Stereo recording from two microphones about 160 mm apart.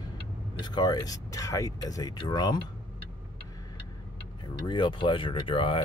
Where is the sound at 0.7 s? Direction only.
25° left (ahead or behind).